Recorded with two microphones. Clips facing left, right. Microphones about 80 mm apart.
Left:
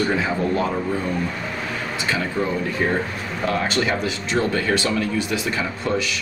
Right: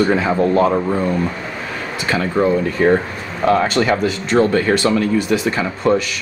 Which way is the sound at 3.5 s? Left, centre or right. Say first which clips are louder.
Right 7 dB; right.